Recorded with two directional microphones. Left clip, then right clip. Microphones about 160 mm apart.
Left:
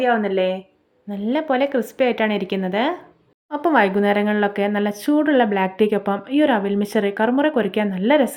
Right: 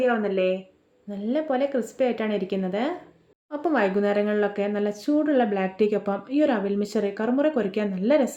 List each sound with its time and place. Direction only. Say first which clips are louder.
0.0 s speech: left 4 dB; 30° left (ahead or behind)